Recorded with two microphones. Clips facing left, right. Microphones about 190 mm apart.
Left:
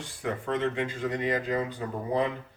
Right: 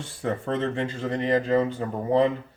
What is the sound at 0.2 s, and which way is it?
Speech, 35° right (ahead or behind).